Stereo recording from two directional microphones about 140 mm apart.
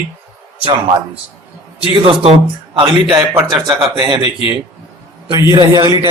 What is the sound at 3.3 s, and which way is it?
Speech, 25° right (ahead or behind).